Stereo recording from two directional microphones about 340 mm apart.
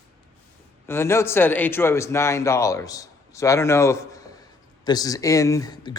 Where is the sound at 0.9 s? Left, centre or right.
Centre.